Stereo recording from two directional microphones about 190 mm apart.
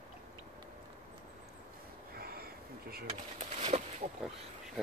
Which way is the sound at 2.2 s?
50° right (ahead or behind).